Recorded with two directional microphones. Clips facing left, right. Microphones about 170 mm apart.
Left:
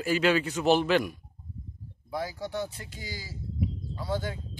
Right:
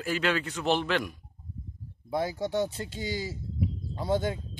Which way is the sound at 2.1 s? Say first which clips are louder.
Right 4 dB; 25° right (ahead or behind).